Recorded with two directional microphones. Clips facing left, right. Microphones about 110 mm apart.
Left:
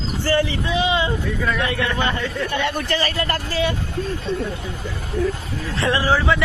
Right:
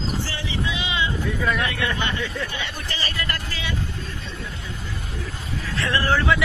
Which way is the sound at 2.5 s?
55° left (ahead or behind).